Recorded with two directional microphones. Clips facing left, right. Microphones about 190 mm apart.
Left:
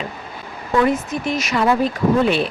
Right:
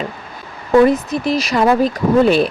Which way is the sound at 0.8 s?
35° right (ahead or behind).